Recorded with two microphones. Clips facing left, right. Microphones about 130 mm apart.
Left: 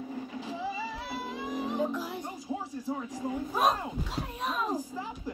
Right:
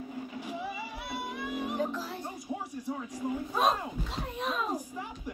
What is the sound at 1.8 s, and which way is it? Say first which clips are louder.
Music: left 2 dB; 15° left (ahead or behind).